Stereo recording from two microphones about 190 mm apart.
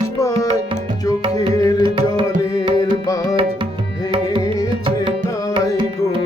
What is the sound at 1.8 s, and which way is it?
Tabla, 25° right (ahead or behind).